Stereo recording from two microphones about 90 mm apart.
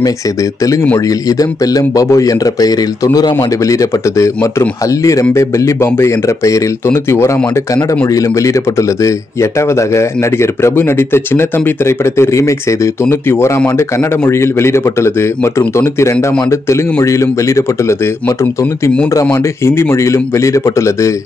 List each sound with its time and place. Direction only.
0.9 s speech: 40° left (ahead or behind)